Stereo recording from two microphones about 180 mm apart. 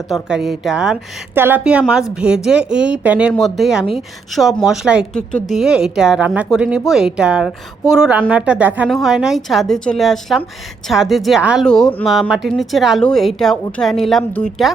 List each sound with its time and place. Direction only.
0.1 s a woman's voice: 5° right (ahead or behind)